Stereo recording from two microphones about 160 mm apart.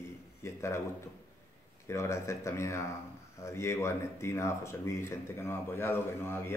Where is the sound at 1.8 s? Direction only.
15° left (ahead or behind).